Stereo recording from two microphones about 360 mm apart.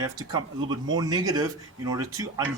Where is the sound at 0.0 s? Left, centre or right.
Centre.